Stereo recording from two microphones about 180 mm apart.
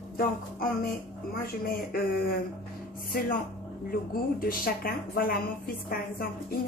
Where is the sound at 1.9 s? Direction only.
55° left (ahead or behind).